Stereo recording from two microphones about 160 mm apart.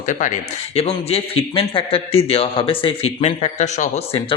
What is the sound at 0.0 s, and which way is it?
Speech, 50° left (ahead or behind).